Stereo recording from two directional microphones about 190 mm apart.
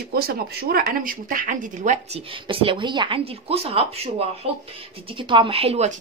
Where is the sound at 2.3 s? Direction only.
25° right (ahead or behind).